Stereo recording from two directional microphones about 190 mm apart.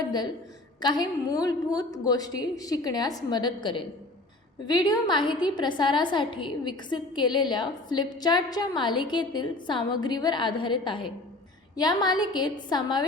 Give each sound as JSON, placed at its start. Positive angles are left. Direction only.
{"t": 0.8, "sound": "a woman's voice", "side_deg": 20}